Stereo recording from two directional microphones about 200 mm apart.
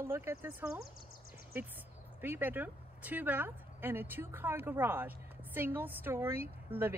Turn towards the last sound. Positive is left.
turn(degrees=-10)  # may be behind; listen again after turning